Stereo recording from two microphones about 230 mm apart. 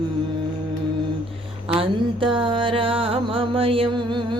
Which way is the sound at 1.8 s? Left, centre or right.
Right.